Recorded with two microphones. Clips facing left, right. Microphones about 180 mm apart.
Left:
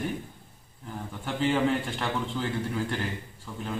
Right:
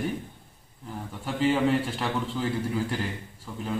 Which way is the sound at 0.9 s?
Centre (ahead or behind).